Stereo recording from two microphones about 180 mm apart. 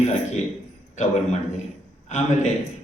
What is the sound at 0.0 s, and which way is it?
A man's voice, 40° left (ahead or behind).